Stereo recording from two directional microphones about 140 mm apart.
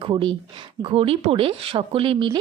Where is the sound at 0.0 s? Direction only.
35° right (ahead or behind).